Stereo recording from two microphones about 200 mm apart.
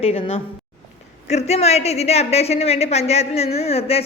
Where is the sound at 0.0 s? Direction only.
30° left (ahead or behind).